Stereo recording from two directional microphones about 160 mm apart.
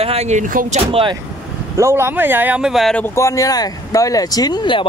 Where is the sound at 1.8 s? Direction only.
15° right (ahead or behind); by 3.1 s 5° left (ahead or behind).